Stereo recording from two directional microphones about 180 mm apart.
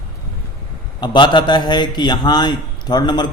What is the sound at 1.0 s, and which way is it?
A man's voice, 25° left (ahead or behind).